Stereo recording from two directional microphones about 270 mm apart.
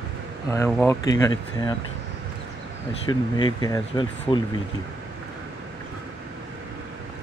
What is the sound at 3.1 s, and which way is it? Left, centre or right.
Speech, centre.